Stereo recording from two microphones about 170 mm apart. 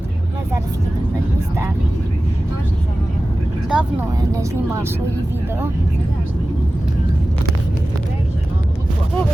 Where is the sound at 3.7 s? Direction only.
5° right (ahead or behind).